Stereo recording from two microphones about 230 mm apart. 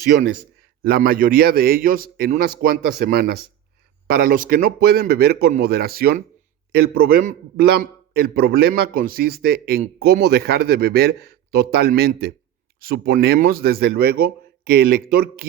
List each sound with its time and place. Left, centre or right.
0.0 s a man's voice: right